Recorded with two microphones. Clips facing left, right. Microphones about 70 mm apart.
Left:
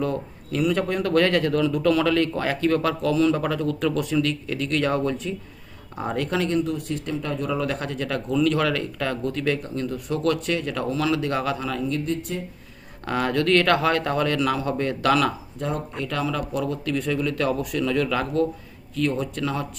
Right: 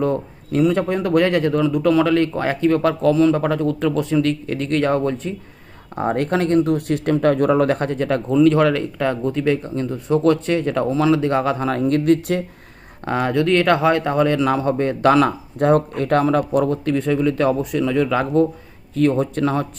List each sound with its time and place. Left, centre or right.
0.0 s speech: right
13.1 s speech: right
15.5 s speech: right